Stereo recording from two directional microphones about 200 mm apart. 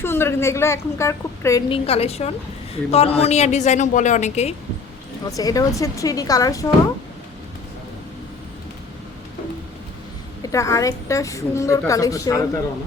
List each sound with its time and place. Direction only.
0.0 s a woman's voice: 10° left (ahead or behind)
1.7 s a woman's voice: 30° left (ahead or behind)
5.3 s a woman's voice: 15° left (ahead or behind)
10.4 s a woman's voice: 15° left (ahead or behind)